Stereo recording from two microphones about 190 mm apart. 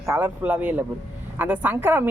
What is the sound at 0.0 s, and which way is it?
Speech, 10° right (ahead or behind).